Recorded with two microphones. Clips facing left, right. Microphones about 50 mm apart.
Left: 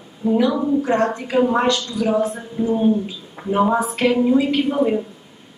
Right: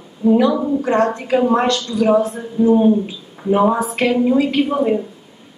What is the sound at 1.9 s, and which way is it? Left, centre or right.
Speech, centre.